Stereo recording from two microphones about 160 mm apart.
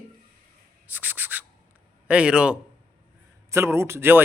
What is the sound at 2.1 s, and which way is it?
A man's voice, 5° right (ahead or behind).